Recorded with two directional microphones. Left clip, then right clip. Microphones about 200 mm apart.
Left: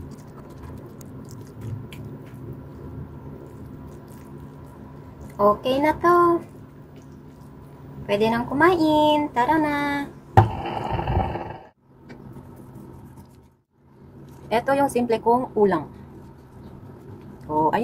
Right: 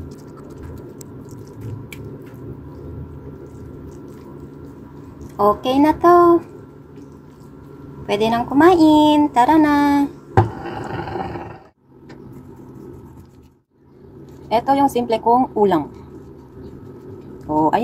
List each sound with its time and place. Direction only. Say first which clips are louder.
5.4 s a woman's voice: right 4 dB; 15° right (ahead or behind)
8.1 s speech: right 4 dB; 15° right (ahead or behind)
10.3 s a sound: left 2 dB; centre (ahead or behind)
14.5 s a woman's voice: right 5 dB; 5° right (ahead or behind)
17.5 s a woman's voice: right 4 dB; 15° right (ahead or behind)